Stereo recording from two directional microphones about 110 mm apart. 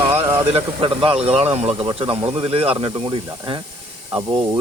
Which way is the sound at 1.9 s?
55° right (ahead or behind).